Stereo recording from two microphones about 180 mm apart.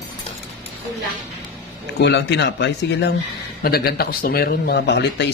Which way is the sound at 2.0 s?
75° left (ahead or behind).